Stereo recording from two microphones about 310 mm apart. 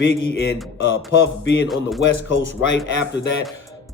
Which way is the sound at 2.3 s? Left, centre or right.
Left.